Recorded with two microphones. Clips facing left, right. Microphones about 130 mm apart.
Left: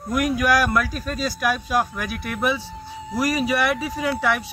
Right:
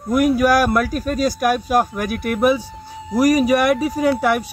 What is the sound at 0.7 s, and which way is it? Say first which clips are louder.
Speech: right 5 dB; 45° right (ahead or behind).